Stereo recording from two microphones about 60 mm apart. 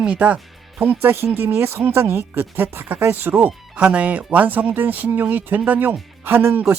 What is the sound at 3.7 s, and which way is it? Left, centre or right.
Speech, right.